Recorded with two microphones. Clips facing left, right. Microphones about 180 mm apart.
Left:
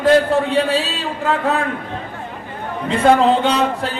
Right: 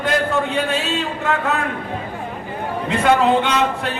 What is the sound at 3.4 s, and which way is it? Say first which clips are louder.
Speech: left 2 dB; 35° left (ahead or behind).